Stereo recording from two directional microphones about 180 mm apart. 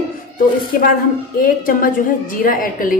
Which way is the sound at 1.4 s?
50° left (ahead or behind).